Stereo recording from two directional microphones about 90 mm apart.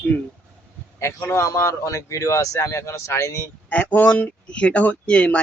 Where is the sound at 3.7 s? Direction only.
15° left (ahead or behind).